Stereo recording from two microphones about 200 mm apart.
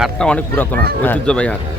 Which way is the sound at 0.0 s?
5° left (ahead or behind).